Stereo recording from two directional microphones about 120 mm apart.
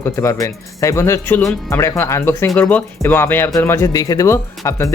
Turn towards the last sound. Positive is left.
turn(degrees=25)  # may be behind; listen again after turning